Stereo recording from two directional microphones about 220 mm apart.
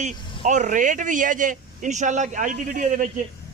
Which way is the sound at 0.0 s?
35° right (ahead or behind).